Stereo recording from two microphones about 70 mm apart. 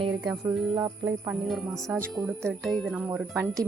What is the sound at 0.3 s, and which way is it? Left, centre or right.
Music, right.